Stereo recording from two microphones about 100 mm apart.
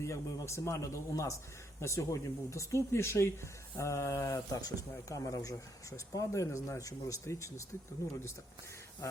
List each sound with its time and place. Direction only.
0.0 s speech: 30° left (ahead or behind)